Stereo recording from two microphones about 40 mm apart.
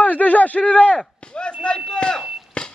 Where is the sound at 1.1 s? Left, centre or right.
Left.